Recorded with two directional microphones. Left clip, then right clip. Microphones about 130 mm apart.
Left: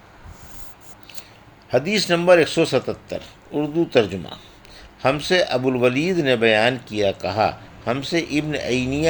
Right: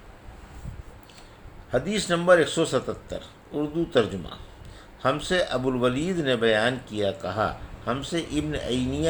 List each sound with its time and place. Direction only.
1.7 s speech: 35° left (ahead or behind)
5.0 s speech: 35° left (ahead or behind)